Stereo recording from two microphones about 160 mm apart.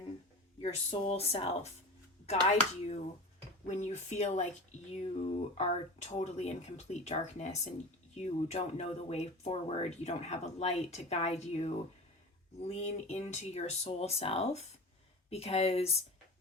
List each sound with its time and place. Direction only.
0.6 s speech: 40° left (ahead or behind)